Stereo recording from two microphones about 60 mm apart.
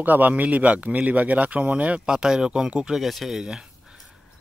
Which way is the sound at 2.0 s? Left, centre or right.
Centre.